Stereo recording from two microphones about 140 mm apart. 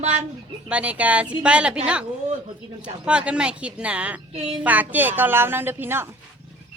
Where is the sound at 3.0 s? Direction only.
5° right (ahead or behind).